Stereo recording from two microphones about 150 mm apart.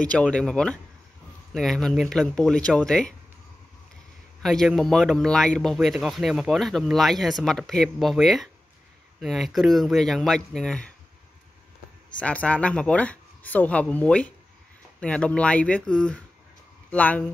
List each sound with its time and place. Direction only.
0.0 s speech: 5° left (ahead or behind)
4.4 s speech: centre (ahead or behind)
12.2 s speech: 10° left (ahead or behind)